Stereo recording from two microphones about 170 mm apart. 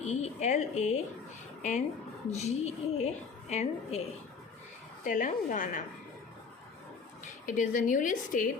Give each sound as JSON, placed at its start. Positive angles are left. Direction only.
{"t": 0.0, "sound": "speech", "side_deg": 40}
{"t": 2.4, "sound": "a woman's voice", "side_deg": 40}
{"t": 5.0, "sound": "speech", "side_deg": 50}
{"t": 7.4, "sound": "speech", "side_deg": 50}